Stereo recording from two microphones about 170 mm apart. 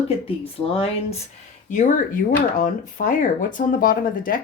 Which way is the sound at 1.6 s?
50° left (ahead or behind).